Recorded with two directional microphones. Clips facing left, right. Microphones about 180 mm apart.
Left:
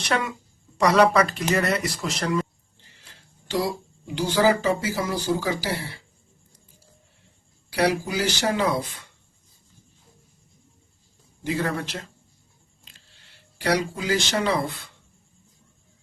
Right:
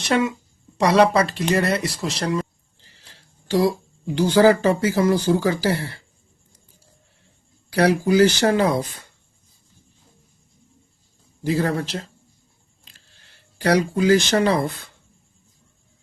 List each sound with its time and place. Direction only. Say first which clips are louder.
0.1 s speech: right 6 dB; 25° right (ahead or behind)
2.8 s a sound: right 1 dB; 35° right (ahead or behind)
4.0 s speech: right 6 dB; 55° right (ahead or behind)
7.8 s speech: right 7 dB; 55° right (ahead or behind)
11.4 s speech: right 5 dB; 35° right (ahead or behind)
13.6 s speech: right 6 dB; 45° right (ahead or behind)